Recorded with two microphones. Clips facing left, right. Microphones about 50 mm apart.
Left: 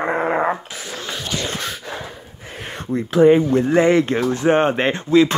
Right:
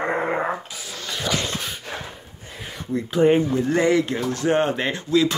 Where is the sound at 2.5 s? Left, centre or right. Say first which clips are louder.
Left 4 dB; left.